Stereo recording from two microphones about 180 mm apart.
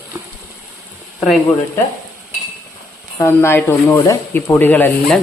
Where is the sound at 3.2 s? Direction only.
15° left (ahead or behind).